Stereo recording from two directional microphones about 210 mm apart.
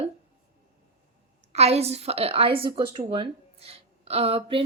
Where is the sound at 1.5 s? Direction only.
30° right (ahead or behind).